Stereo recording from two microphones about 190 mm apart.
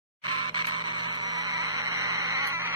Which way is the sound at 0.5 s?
25° right (ahead or behind).